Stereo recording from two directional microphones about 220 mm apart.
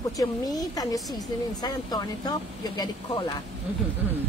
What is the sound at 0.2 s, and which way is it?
A woman's voice, 15° left (ahead or behind).